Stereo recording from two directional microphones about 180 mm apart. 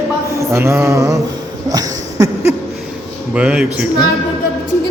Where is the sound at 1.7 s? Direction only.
20° right (ahead or behind).